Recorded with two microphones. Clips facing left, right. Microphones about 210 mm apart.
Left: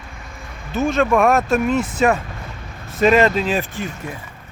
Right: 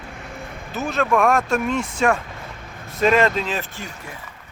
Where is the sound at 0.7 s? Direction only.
Centre (ahead or behind).